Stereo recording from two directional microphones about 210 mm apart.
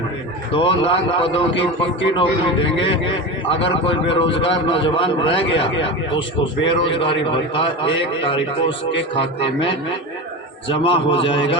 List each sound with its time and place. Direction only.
0.5 s a man's voice: 25° left (ahead or behind)
6.7 s a man's voice: 25° left (ahead or behind)